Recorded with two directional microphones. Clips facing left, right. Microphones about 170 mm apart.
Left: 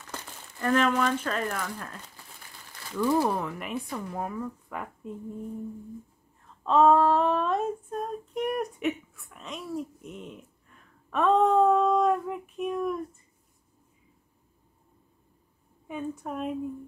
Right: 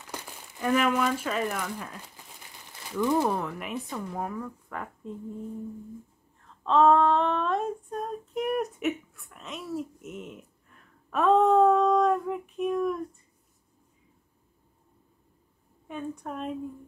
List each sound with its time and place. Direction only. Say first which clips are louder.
0.0 s speech: right 1 dB; 10° right (ahead or behind)
2.7 s crumpling: right 1 dB; 15° right (ahead or behind)
3.1 s female singing: left 1 dB; centre (ahead or behind)
6.6 s female singing: even; 5° left (ahead or behind)
15.9 s female singing: left 1 dB; 5° left (ahead or behind)